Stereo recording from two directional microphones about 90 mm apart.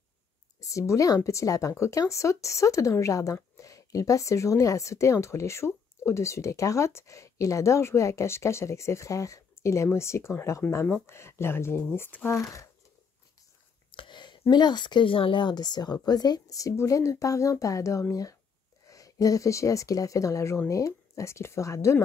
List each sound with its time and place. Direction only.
0.6 s speech: 35° left (ahead or behind)
12.4 s speech: 35° left (ahead or behind)
13.9 s a sound: 60° left (ahead or behind)
14.5 s speech: 55° left (ahead or behind); by 21.9 s 35° left (ahead or behind)